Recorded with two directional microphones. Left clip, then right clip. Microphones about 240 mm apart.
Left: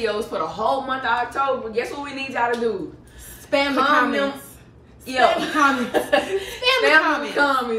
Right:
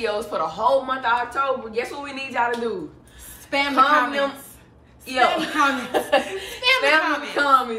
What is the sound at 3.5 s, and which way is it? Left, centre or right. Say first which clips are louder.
Speech: left 2 dB; centre.